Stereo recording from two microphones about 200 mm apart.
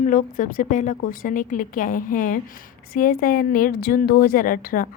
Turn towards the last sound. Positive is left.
turn(degrees=45)  # may be behind; listen again after turning